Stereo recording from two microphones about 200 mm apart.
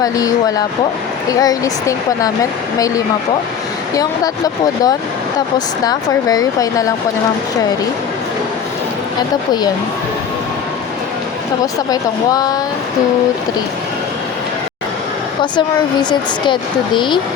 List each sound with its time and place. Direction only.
0.0 s speech: 15° left (ahead or behind)
11.6 s speech: 20° left (ahead or behind)
15.5 s speech: 20° left (ahead or behind)